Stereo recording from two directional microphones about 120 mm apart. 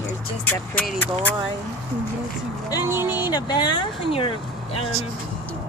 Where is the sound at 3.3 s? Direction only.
35° left (ahead or behind).